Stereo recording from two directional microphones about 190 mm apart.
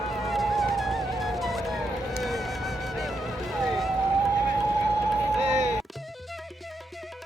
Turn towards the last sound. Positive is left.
turn(degrees=-35)  # may be behind; listen again after turning